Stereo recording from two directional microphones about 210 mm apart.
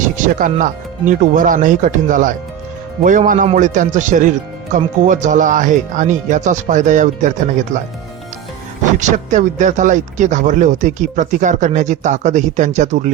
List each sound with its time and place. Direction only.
0.3 s speech: 40° right (ahead or behind)